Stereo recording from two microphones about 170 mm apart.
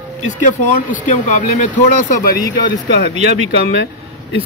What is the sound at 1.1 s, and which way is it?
Speech, 45° left (ahead or behind).